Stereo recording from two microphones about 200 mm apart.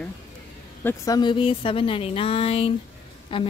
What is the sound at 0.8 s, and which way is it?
A woman's voice, 15° left (ahead or behind).